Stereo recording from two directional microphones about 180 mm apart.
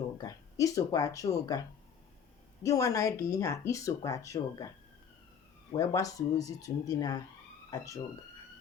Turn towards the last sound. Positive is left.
turn(degrees=15)  # may be behind; listen again after turning